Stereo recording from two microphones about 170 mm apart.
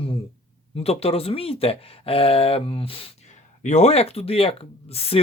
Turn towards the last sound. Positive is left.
turn(degrees=35)  # may be behind; listen again after turning